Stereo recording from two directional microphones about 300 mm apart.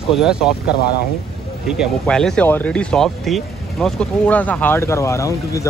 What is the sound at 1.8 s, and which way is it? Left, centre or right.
Speech, centre.